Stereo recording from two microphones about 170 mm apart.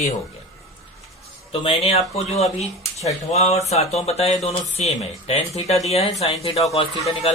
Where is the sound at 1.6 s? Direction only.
35° left (ahead or behind).